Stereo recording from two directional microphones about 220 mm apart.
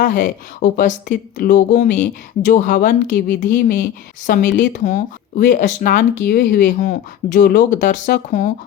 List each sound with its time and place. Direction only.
0.0 s speech: 35° left (ahead or behind)